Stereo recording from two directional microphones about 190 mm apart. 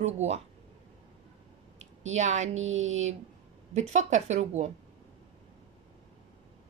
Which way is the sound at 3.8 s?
40° right (ahead or behind).